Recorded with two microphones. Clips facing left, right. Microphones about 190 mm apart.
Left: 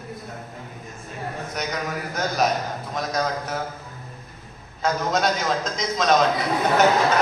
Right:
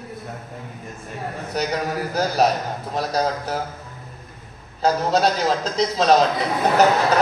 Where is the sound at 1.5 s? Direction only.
35° right (ahead or behind).